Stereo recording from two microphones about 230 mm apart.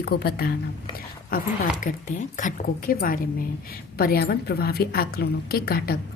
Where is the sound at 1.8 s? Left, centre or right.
Left.